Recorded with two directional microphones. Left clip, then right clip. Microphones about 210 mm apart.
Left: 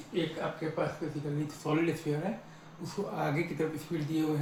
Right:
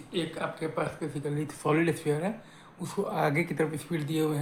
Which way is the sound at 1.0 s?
15° right (ahead or behind).